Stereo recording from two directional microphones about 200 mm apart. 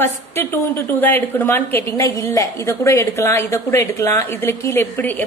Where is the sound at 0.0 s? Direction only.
10° left (ahead or behind).